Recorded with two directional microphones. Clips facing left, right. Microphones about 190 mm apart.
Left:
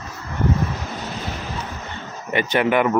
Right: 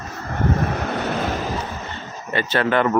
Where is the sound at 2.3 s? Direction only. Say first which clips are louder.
Left 1 dB; 15° left (ahead or behind).